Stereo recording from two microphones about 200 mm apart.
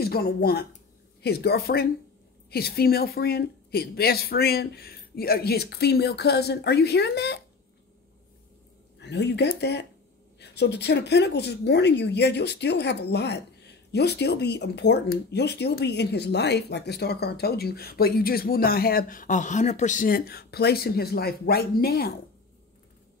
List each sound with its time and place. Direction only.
0.0 s speech: 50° left (ahead or behind)
9.0 s speech: 55° left (ahead or behind)